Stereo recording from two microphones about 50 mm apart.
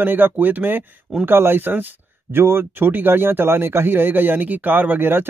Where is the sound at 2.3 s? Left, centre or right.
Right.